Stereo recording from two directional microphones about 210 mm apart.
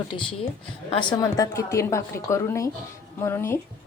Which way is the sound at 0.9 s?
20° left (ahead or behind).